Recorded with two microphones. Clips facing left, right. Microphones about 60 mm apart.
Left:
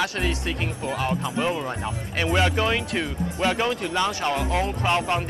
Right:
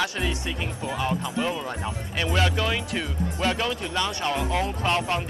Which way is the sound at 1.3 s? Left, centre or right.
Centre.